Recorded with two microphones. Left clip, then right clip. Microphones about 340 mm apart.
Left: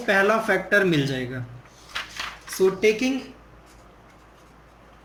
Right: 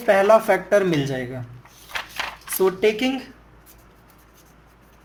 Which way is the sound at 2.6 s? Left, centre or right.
Right.